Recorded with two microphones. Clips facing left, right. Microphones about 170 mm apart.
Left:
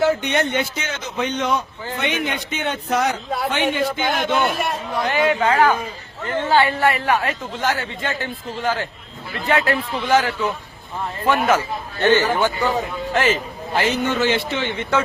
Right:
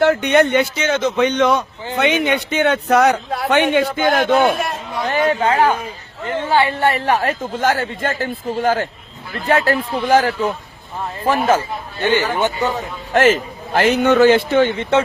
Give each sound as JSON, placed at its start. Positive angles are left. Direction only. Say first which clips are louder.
{"t": 0.0, "sound": "a man's voice", "louder": "right 5 dB", "side_deg": -65}
{"t": 2.2, "sound": "a man's voice", "louder": "right 8 dB", "side_deg": -70}
{"t": 4.0, "sound": "a woman's voice", "louder": "right 7 dB", "side_deg": -45}
{"t": 5.1, "sound": "a woman's voice", "louder": "right 2 dB", "side_deg": -35}
{"t": 11.9, "sound": "speech", "louder": "left 1 dB", "side_deg": -15}
{"t": 13.1, "sound": "a woman's voice", "louder": "right 7 dB", "side_deg": -50}
{"t": 14.8, "sound": "speech", "louder": "right 4 dB", "side_deg": -30}